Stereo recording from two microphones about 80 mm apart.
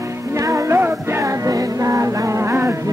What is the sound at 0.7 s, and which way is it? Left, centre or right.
Music, right.